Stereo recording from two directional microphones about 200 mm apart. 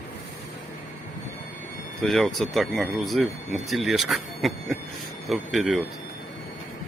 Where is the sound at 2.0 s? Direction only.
Centre (ahead or behind).